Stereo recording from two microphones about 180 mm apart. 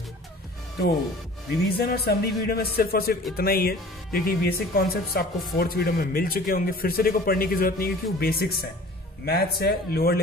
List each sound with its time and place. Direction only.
1.7 s speech: 60° left (ahead or behind)